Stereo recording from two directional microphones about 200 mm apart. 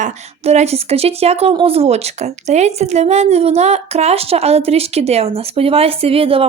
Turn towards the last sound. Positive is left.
turn(degrees=-30)  # may be behind; listen again after turning